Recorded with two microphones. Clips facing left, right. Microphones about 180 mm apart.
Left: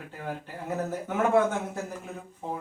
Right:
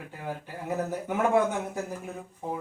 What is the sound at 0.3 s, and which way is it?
Speech, 10° right (ahead or behind).